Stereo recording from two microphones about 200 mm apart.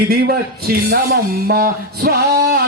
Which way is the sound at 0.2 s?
50° right (ahead or behind).